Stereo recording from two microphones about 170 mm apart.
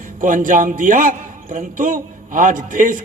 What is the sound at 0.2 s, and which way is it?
A man's voice, 50° right (ahead or behind).